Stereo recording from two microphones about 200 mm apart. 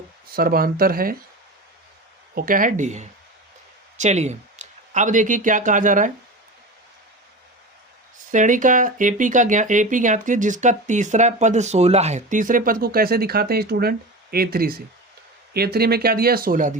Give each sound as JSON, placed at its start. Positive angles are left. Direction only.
{"t": 0.3, "sound": "speech", "side_deg": -45}
{"t": 2.3, "sound": "speech", "side_deg": -45}
{"t": 8.3, "sound": "speech", "side_deg": -40}